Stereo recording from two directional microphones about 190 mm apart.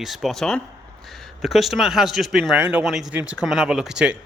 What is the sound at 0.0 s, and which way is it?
Speech, centre (ahead or behind).